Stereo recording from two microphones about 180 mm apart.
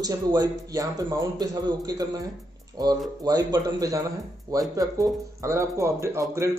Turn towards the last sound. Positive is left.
turn(degrees=-15)  # may be behind; listen again after turning